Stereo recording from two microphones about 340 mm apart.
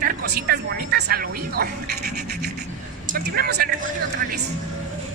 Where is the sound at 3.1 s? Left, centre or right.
Right.